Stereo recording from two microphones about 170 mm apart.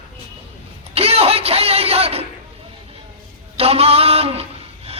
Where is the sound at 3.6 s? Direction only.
35° right (ahead or behind).